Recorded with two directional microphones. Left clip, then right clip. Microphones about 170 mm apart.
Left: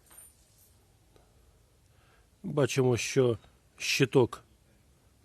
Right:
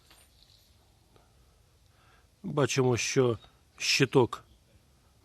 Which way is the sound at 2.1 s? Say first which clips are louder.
Even; 15° left (ahead or behind).